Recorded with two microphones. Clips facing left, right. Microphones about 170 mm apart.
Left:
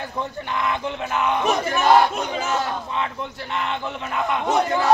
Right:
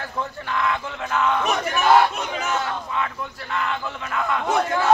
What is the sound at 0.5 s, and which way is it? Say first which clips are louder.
Speech: even; 20° left (ahead or behind).